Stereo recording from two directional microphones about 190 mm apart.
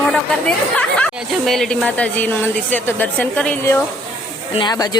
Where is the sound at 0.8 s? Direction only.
5° left (ahead or behind).